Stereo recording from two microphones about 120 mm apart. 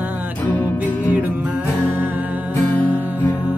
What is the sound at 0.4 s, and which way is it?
Music, 15° left (ahead or behind).